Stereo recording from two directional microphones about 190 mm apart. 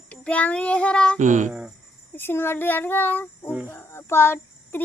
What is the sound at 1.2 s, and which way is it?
Speech, 40° right (ahead or behind).